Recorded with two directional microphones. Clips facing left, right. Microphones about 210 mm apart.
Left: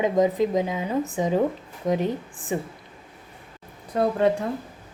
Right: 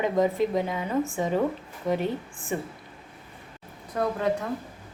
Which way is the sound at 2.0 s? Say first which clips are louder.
Left 3 dB; 40° left (ahead or behind).